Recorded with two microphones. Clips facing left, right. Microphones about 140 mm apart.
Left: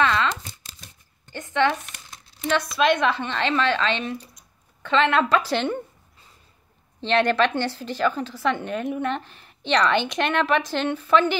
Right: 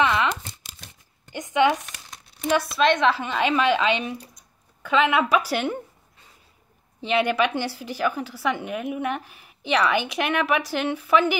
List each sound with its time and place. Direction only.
0.0 s crumpling: 15° right (ahead or behind)
1.3 s a sound: 15° right (ahead or behind)
2.4 s a woman's voice: 5° right (ahead or behind)
7.0 s a woman's voice: 10° right (ahead or behind)